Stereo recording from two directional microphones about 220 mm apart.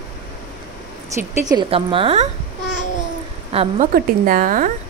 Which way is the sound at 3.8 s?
40° right (ahead or behind).